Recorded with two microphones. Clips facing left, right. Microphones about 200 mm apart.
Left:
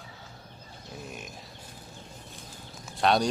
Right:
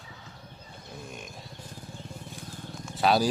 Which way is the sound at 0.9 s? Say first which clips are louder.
Left 1 dB; 5° left (ahead or behind).